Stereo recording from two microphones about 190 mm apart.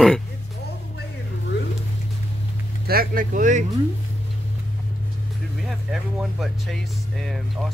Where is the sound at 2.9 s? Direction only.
50° right (ahead or behind).